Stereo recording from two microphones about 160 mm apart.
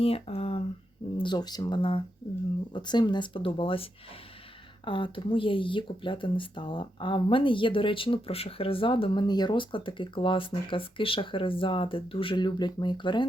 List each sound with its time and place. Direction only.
0.0 s a sound: 40° left (ahead or behind)
1.2 s speech: 25° left (ahead or behind)
4.9 s speech: 30° left (ahead or behind)